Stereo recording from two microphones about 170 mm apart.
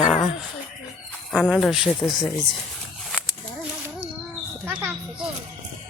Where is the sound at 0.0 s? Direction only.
Centre (ahead or behind).